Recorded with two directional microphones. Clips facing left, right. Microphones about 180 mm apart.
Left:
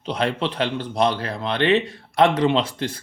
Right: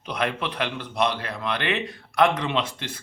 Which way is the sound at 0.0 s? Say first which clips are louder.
Left 4 dB; 30° left (ahead or behind).